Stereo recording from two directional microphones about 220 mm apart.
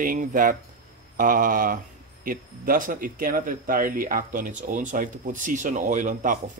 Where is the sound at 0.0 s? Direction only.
35° right (ahead or behind).